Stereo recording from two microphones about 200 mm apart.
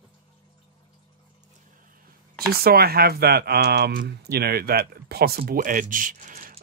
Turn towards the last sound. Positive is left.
turn(degrees=-40)  # may be behind; listen again after turning